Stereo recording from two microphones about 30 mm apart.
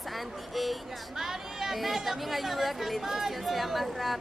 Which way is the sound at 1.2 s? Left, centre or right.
Centre.